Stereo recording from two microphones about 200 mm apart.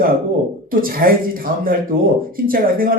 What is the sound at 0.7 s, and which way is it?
Speech, 45° right (ahead or behind).